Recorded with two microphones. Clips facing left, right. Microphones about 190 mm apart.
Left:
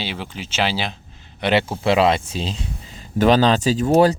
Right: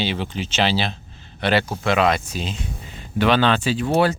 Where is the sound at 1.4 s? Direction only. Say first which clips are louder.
Left 1 dB; 20° left (ahead or behind); by 4.1 s 40° left (ahead or behind).